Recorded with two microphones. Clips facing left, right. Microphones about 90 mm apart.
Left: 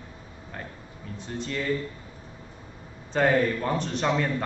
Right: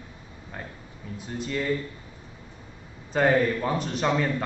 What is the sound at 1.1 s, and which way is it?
Speech, 5° right (ahead or behind).